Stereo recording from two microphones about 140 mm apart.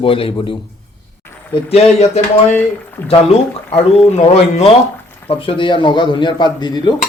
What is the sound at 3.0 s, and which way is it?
Speech, 45° left (ahead or behind).